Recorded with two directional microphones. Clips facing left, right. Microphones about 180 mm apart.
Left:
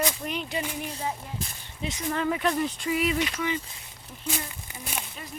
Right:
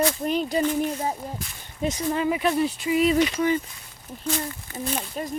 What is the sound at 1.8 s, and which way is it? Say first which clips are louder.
Speech: right 7 dB; 50° right (ahead or behind).